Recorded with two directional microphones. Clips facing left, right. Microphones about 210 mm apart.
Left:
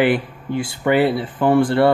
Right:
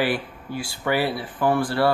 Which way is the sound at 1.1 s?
25° left (ahead or behind).